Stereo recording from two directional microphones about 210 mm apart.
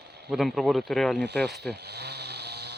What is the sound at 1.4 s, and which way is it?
Speech, centre (ahead or behind).